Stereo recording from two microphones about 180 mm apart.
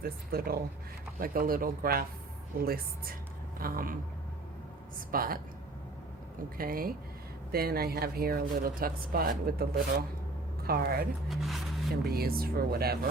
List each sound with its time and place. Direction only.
0.0 s speech: 55° right (ahead or behind)
4.9 s speech: 55° right (ahead or behind)
6.6 s speech: 55° right (ahead or behind)
11.3 s speech: centre (ahead or behind)
12.0 s speech: 55° right (ahead or behind)